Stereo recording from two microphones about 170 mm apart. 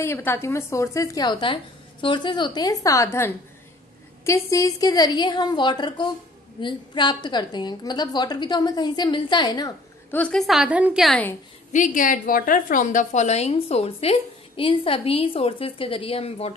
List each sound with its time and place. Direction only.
0.0 s a woman's voice: 15° left (ahead or behind)
10.1 s a woman's voice: 5° left (ahead or behind)
11.7 s a woman's voice: 50° left (ahead or behind)